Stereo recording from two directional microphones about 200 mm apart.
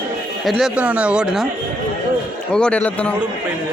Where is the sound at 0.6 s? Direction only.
5° right (ahead or behind).